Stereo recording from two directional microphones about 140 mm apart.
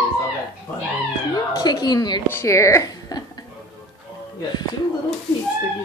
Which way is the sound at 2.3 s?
20° left (ahead or behind).